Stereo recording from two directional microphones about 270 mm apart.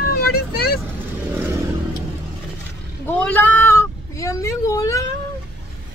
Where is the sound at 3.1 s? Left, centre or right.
Centre.